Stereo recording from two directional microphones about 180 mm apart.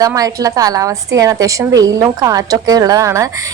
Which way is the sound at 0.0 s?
20° right (ahead or behind).